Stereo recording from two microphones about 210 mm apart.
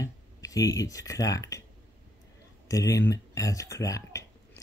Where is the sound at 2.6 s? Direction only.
15° left (ahead or behind).